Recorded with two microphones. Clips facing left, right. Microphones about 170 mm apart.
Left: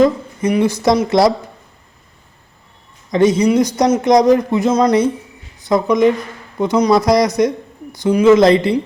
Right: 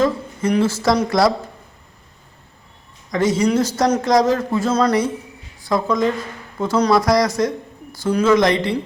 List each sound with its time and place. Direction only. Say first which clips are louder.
0.0 s speech: left 5 dB; 15° left (ahead or behind)
3.1 s speech: left 5 dB; 20° left (ahead or behind)